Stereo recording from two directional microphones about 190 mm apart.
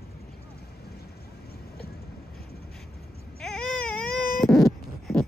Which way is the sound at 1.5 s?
55° left (ahead or behind).